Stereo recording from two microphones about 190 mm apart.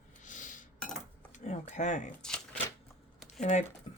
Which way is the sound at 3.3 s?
40° left (ahead or behind).